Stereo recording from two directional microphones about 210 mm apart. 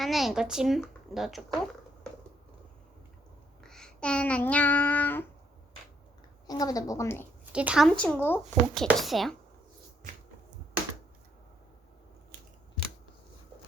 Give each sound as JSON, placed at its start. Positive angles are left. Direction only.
{"t": 0.0, "sound": "speech", "side_deg": 0}
{"t": 3.6, "sound": "a sound", "side_deg": 5}
{"t": 6.5, "sound": "a woman's voice", "side_deg": 15}
{"t": 7.5, "sound": "speech", "side_deg": -5}